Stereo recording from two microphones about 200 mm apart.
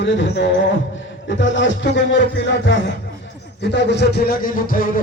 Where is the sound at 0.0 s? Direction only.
65° left (ahead or behind).